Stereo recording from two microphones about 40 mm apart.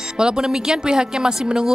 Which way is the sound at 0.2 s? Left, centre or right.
Centre.